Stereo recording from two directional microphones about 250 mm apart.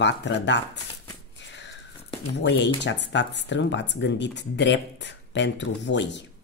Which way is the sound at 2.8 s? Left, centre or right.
Left.